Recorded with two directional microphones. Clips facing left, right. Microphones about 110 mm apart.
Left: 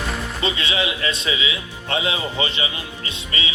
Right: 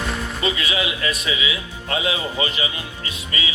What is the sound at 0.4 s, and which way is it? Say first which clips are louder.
Speech: even; 30° left (ahead or behind).